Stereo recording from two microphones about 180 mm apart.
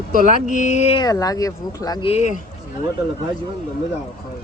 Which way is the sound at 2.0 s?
35° left (ahead or behind).